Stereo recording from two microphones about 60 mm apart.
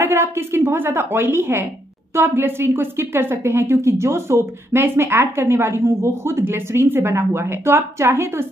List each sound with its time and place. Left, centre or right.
0.0 s a woman's voice: right